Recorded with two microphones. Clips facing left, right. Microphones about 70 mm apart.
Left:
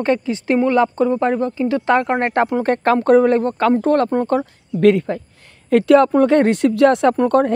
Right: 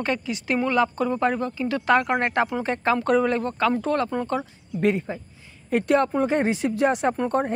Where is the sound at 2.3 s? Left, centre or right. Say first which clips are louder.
Left 7 dB; left.